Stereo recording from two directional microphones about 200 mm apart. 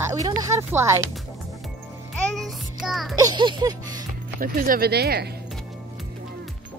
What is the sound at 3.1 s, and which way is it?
Music, 20° right (ahead or behind).